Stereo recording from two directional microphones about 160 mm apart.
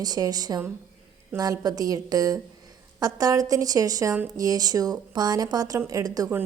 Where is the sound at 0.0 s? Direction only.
25° right (ahead or behind).